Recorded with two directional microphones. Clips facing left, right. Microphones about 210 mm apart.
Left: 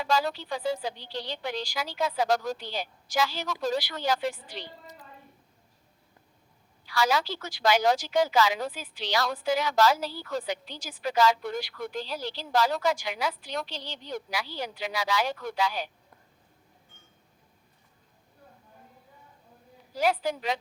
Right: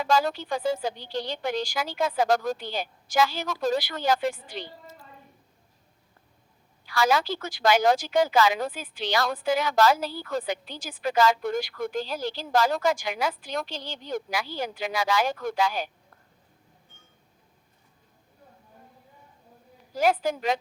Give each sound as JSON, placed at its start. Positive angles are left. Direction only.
{"t": 0.0, "sound": "a woman's voice", "side_deg": -45}
{"t": 6.8, "sound": "a woman's voice", "side_deg": -50}
{"t": 19.9, "sound": "a woman's voice", "side_deg": -45}